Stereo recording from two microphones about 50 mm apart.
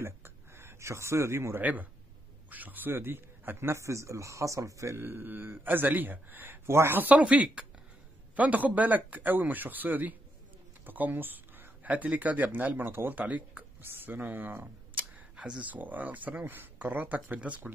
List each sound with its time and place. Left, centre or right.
0.0 s a sound: right
1.6 s a man's voice: right
3.7 s speech: right
5.0 s speech: right
7.0 s speech: right
7.2 s speech: right
10.9 s a sound: right
11.9 s speech: right
13.1 s speech: right
13.7 s speech: right
15.3 s a sound: centre
15.6 s speech: right